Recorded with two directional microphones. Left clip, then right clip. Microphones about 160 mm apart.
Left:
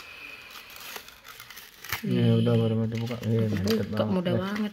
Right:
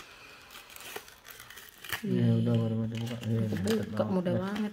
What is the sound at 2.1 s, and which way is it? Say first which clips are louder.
Speech: left 6 dB; 65° left (ahead or behind).